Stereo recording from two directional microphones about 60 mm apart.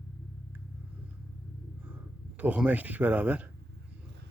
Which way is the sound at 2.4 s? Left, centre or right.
Right.